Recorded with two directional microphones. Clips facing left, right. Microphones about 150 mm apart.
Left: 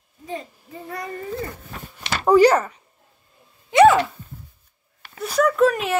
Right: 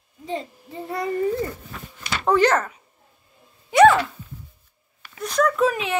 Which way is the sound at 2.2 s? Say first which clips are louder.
Left 4 dB; 10° left (ahead or behind).